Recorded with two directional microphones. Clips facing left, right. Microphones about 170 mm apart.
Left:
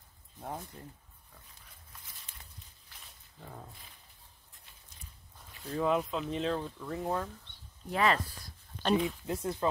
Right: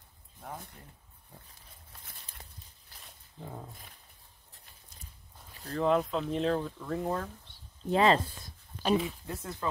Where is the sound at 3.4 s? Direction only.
25° right (ahead or behind).